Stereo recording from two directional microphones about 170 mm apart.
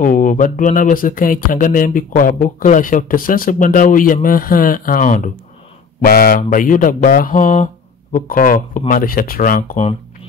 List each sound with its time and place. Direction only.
0.0 s speech: 50° left (ahead or behind)
5.9 s speech: 60° left (ahead or behind); by 9.9 s 45° left (ahead or behind)